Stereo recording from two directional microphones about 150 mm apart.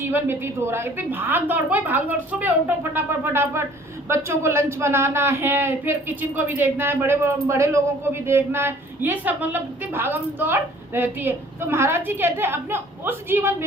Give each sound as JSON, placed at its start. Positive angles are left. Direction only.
{"t": 0.0, "sound": "speech", "side_deg": -15}